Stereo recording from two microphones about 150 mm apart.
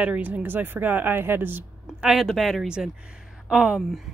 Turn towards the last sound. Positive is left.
turn(degrees=0)  # may be behind; listen again after turning